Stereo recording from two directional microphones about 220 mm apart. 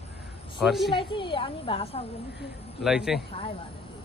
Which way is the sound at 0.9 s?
20° left (ahead or behind).